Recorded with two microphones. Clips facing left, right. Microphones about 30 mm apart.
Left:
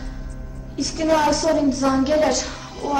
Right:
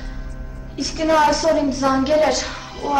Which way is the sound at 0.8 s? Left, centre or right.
Centre.